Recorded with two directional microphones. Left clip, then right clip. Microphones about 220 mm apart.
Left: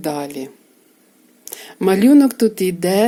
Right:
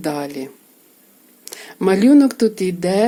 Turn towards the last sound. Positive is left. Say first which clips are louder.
# left 1 dB
turn(degrees=15)  # may be behind; listen again after turning